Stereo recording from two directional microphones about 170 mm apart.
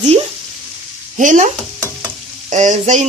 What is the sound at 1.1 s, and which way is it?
Frying, 50° right (ahead or behind).